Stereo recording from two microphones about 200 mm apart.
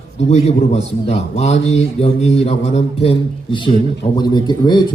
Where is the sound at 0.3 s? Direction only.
30° left (ahead or behind).